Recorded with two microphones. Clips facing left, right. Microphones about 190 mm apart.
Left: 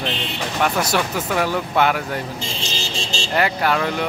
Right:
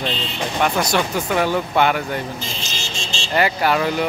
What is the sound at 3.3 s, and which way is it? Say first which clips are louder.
Speech: right 2 dB; 5° right (ahead or behind).